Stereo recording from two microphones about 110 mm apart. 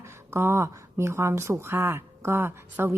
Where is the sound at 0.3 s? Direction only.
25° right (ahead or behind).